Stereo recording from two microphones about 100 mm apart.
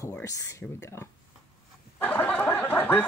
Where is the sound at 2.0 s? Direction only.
15° left (ahead or behind).